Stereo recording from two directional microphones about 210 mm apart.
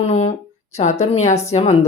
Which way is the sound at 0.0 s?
30° left (ahead or behind).